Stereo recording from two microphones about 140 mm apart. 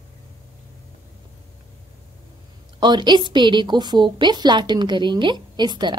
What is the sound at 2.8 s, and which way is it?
A woman's voice, 30° right (ahead or behind).